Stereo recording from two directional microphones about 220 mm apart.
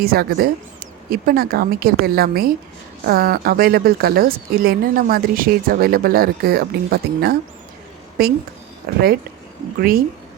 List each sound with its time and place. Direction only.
0.0 s a woman's voice: 45° right (ahead or behind)
9.7 s a woman's voice: 40° right (ahead or behind)